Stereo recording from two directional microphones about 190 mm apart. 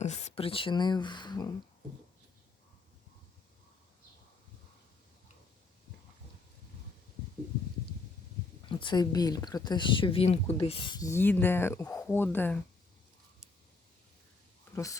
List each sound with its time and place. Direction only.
0.0 s speech: 35° left (ahead or behind)
8.7 s speech: 25° left (ahead or behind)